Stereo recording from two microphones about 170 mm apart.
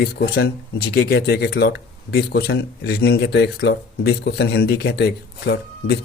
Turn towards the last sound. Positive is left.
turn(degrees=85)